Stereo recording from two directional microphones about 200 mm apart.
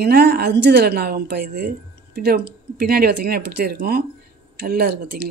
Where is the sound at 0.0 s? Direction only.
55° right (ahead or behind).